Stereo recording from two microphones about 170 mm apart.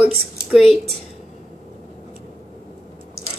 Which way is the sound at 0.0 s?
5° right (ahead or behind).